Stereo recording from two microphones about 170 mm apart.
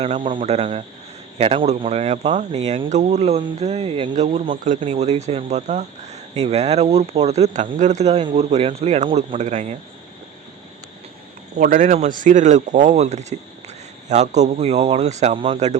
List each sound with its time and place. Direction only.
0.0 s speech: 35° right (ahead or behind)
11.5 s speech: 50° right (ahead or behind)